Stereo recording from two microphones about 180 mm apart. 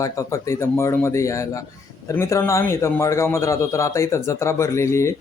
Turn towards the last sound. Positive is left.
turn(degrees=15)  # may be behind; listen again after turning